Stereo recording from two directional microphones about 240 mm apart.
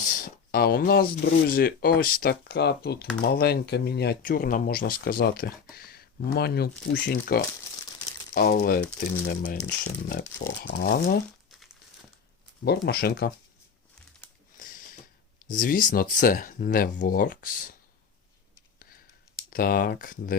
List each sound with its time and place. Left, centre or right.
0.0 s speech: left
11.5 s crumpling: centre
12.6 s speech: left
14.6 s a sound: left
15.4 s speech: left
19.5 s speech: left